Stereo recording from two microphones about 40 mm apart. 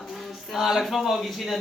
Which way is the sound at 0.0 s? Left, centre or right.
Centre.